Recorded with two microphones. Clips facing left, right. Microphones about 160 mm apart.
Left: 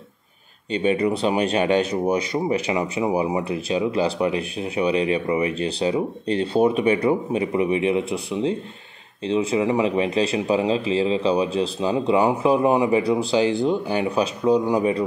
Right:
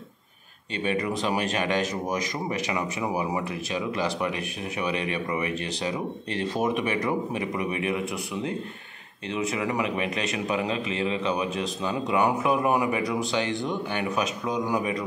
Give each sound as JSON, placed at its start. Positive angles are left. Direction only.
{"t": 0.8, "sound": "speech", "side_deg": 30}